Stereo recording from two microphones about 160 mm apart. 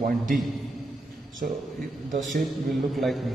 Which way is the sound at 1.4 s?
65° right (ahead or behind).